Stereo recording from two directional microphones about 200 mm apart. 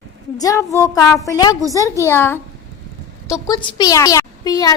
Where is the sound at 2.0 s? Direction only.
10° left (ahead or behind).